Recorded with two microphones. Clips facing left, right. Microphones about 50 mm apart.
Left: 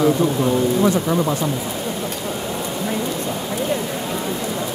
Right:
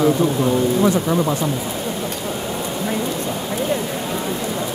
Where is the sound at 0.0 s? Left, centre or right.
Centre.